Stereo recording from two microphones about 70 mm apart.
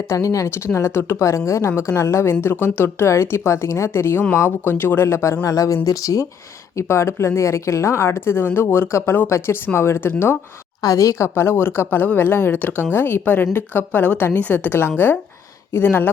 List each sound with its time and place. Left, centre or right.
0.1 s a woman's voice: left
5.4 s speech: left
6.7 s a woman's voice: left
10.8 s a woman's voice: left